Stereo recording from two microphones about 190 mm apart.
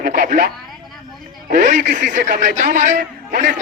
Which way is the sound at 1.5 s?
45° right (ahead or behind).